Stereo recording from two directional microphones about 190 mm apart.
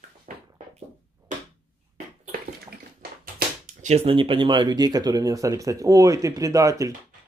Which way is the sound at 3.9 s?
30° right (ahead or behind).